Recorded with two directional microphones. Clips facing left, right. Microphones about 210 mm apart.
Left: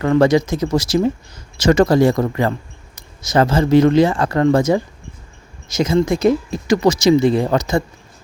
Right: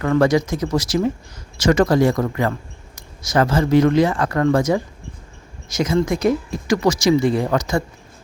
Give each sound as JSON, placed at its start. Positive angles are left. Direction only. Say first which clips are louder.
{"t": 0.0, "sound": "speech", "louder": "left 3 dB", "side_deg": 25}